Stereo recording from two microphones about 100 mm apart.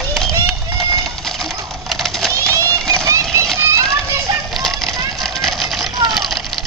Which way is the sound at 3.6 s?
30° right (ahead or behind).